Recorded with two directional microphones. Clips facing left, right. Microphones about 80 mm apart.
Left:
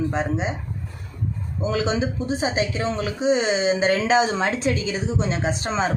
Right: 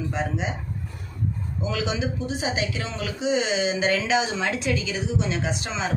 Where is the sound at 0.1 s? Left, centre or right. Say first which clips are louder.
Left 3 dB; left.